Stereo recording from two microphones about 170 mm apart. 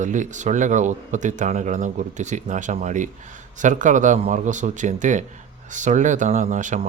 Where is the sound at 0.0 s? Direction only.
45° right (ahead or behind).